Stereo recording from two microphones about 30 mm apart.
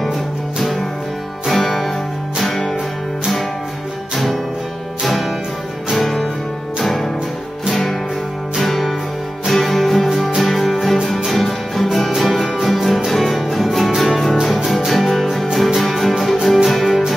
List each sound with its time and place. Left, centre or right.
1.5 s music: centre
5.0 s music: centre
6.8 s music: centre
8.5 s music: centre